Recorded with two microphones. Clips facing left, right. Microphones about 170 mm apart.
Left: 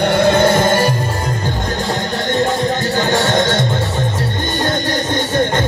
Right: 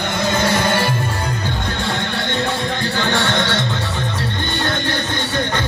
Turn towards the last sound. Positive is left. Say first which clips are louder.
# left 5 dB
turn(degrees=45)  # may be behind; listen again after turning